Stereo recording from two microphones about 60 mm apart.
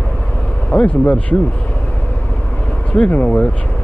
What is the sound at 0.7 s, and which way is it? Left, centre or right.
Speech, left.